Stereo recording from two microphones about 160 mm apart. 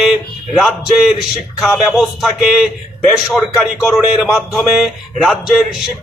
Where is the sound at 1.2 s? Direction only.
Centre (ahead or behind).